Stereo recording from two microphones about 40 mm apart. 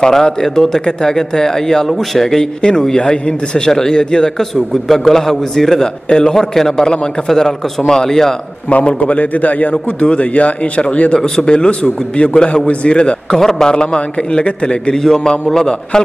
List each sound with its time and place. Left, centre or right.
0.0 s speech: centre
2.6 s speech: centre
4.8 s speech: centre
6.0 s speech: left
6.3 s speech: centre
8.6 s speech: left
9.9 s speech: left
11.1 s speech: centre
13.4 s speech: centre
13.7 s speech: left